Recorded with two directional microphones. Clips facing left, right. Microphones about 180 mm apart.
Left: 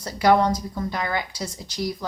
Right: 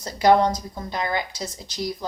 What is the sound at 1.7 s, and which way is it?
Speech, 10° left (ahead or behind).